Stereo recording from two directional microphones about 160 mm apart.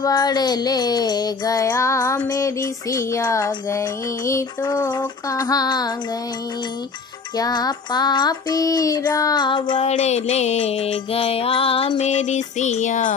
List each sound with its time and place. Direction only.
0.0 s child singing: 25° left (ahead or behind)
7.3 s child singing: 25° left (ahead or behind)
9.8 s music: 45° left (ahead or behind)
12.0 s music: 45° left (ahead or behind)